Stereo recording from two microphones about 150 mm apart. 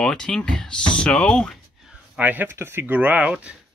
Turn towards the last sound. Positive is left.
turn(degrees=-10)  # may be behind; listen again after turning